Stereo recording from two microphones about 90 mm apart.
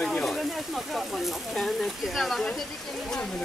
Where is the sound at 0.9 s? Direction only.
Centre (ahead or behind).